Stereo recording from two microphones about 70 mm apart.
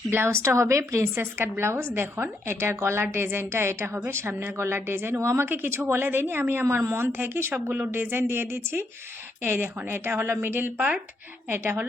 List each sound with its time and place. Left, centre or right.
0.1 s a woman's voice: right